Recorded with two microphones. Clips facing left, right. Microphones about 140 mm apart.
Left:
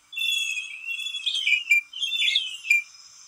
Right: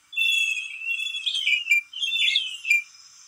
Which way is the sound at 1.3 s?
35° left (ahead or behind).